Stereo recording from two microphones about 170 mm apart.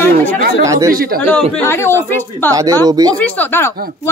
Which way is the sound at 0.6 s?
20° right (ahead or behind).